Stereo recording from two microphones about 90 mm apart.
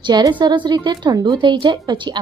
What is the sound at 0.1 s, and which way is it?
A woman's voice, 55° right (ahead or behind).